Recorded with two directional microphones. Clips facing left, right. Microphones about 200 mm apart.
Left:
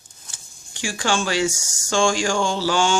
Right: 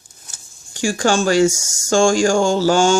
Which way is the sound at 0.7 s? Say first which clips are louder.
Right 6 dB; 45° right (ahead or behind).